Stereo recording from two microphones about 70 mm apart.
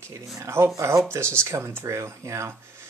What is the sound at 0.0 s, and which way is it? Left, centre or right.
Speech, right.